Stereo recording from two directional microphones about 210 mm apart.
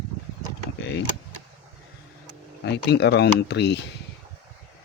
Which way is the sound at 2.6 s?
55° left (ahead or behind).